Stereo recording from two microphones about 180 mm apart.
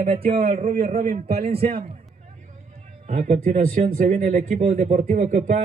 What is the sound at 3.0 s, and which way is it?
A man's voice, 40° right (ahead or behind).